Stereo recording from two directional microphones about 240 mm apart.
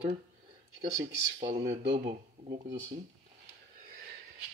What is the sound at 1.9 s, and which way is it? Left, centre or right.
Speech, right.